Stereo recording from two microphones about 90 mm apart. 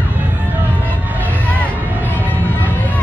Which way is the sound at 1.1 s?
20° right (ahead or behind).